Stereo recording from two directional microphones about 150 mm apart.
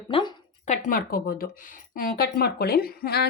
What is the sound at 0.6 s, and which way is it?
A woman's voice, 55° left (ahead or behind).